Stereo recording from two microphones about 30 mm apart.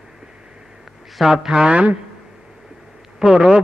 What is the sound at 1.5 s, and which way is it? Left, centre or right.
Speech, right.